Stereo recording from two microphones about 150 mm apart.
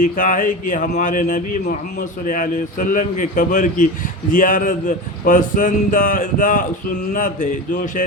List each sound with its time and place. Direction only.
0.0 s speech: 65° left (ahead or behind)